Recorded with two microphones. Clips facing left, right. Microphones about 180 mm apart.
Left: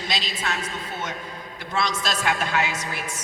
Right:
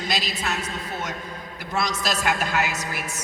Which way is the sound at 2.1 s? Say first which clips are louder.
Right 1 dB; 5° right (ahead or behind).